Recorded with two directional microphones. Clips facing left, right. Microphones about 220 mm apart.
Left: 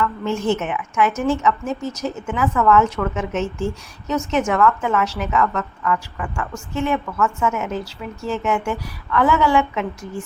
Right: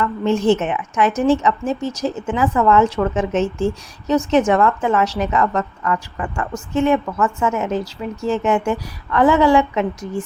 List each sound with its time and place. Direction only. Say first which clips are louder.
0.0 s a woman's voice: right 4 dB; 35° right (ahead or behind)